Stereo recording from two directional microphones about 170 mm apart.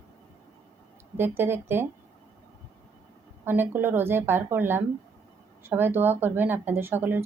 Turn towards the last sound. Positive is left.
turn(degrees=-10)  # may be behind; listen again after turning